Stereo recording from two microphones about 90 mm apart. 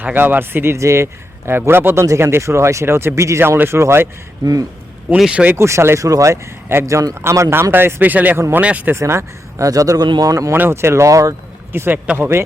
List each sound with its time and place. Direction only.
0.0 s a man's voice: 20° right (ahead or behind)
4.4 s speech: 45° right (ahead or behind)
5.1 s speech: 10° right (ahead or behind)
5.5 s a man's voice: 30° right (ahead or behind)
9.0 s speech: 30° right (ahead or behind)
10.5 s speech: 25° right (ahead or behind)
11.7 s a man's voice: 25° right (ahead or behind)